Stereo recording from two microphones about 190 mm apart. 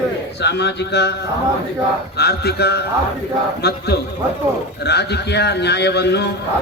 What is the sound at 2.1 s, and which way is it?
A man's voice, 60° left (ahead or behind).